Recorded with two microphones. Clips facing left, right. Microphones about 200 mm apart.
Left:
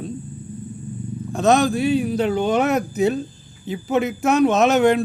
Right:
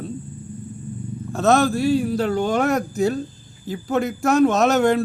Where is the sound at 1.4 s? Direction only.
Centre (ahead or behind).